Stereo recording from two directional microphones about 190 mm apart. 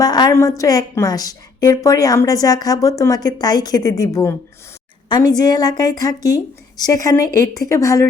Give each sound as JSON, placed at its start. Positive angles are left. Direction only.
{"t": 0.0, "sound": "a woman's voice", "side_deg": 20}